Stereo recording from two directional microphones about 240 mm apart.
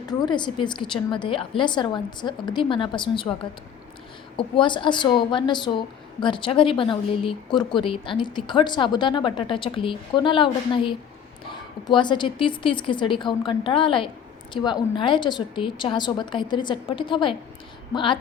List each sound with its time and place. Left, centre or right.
0.1 s a woman's voice: centre
4.4 s a woman's voice: centre